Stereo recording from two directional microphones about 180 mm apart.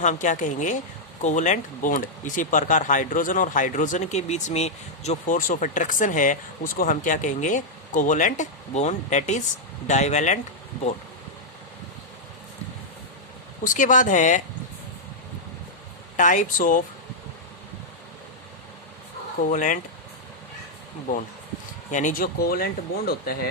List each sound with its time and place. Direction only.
0.0 s speech: 45° left (ahead or behind)
13.7 s speech: 45° left (ahead or behind)
16.1 s speech: 45° left (ahead or behind)
19.4 s speech: 45° left (ahead or behind)
21.9 s speech: 45° left (ahead or behind)